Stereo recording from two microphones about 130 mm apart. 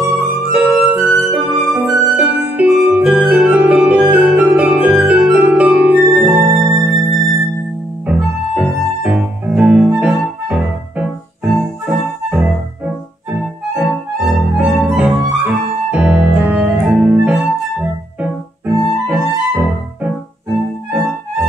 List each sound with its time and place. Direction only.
0.0 s music: 15° right (ahead or behind)
6.6 s music: 20° right (ahead or behind)
8.1 s music: 10° right (ahead or behind)
13.3 s music: 5° right (ahead or behind)
19.0 s music: 10° right (ahead or behind)